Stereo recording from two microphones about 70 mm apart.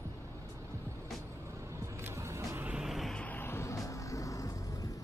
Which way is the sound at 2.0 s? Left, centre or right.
Right.